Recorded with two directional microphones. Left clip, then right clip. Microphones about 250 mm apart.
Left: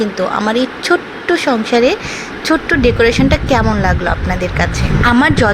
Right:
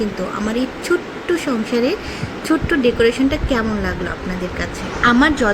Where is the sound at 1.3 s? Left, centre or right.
Centre.